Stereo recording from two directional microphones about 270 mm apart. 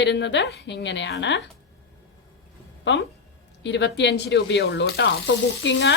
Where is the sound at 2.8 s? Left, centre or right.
Left.